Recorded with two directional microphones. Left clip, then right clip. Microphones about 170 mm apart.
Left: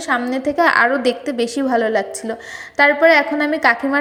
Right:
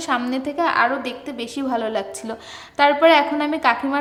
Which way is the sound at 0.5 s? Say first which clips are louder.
Left 5 dB; 30° left (ahead or behind).